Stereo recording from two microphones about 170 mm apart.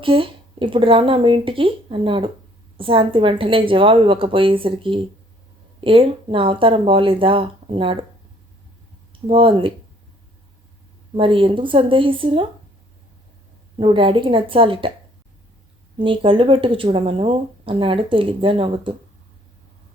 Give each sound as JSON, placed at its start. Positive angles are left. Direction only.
{"t": 0.0, "sound": "speech", "side_deg": -30}
{"t": 9.2, "sound": "speech", "side_deg": -30}
{"t": 11.2, "sound": "speech", "side_deg": -30}
{"t": 13.7, "sound": "speech", "side_deg": -30}
{"t": 16.0, "sound": "speech", "side_deg": -30}